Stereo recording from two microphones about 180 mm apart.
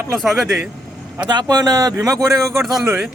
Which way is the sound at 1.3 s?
20° right (ahead or behind).